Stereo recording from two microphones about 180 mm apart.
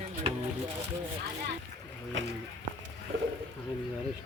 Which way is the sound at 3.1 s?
80° right.